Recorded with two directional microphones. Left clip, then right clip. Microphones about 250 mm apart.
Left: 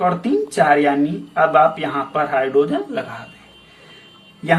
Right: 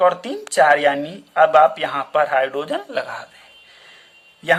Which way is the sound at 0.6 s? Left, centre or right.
Right.